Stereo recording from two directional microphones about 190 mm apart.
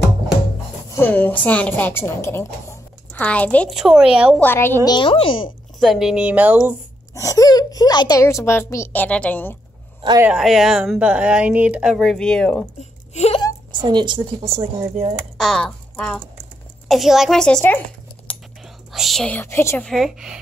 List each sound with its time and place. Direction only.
0.9 s a woman's voice: 10° left (ahead or behind)
4.4 s a woman's voice: 10° left (ahead or behind)
4.8 s speech: 25° left (ahead or behind)
5.8 s speech: centre (ahead or behind)
7.2 s a woman's voice: 15° left (ahead or behind)
10.2 s speech: centre (ahead or behind)
13.1 s speech: 35° left (ahead or behind)
13.7 s a woman's voice: 25° right (ahead or behind)
15.3 s speech: 5° left (ahead or behind)
18.3 s computer keyboard: 5° left (ahead or behind)
18.9 s a woman's voice: centre (ahead or behind)
19.9 s speech: centre (ahead or behind)